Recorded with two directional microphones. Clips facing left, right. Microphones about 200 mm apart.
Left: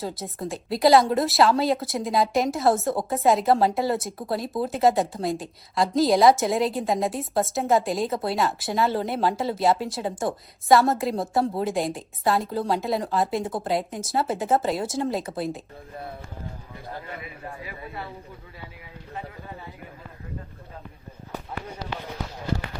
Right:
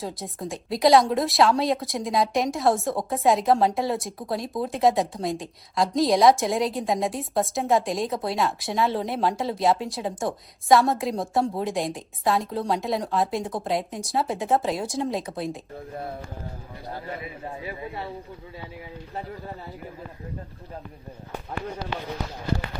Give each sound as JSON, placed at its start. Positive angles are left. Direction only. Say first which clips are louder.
{"t": 0.0, "sound": "a woman's voice", "louder": "left 1 dB", "side_deg": 0}
{"t": 17.4, "sound": "a man's voice", "louder": "right 4 dB", "side_deg": -20}